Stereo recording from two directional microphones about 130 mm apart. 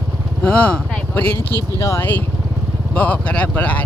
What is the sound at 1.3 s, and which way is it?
Speech, 20° left (ahead or behind).